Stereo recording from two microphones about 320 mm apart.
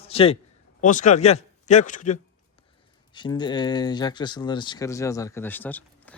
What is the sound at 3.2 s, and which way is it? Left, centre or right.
Speech, centre.